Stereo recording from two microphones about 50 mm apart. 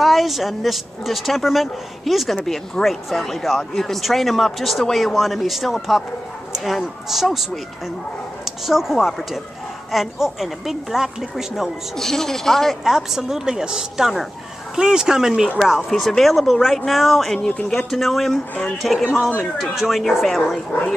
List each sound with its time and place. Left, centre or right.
0.0 s speech: centre
8.5 s speech: centre
12.0 s speech: centre
12.8 s a woman's voice: centre
15.9 s speech: centre
17.4 s speech: centre
17.6 s speech: centre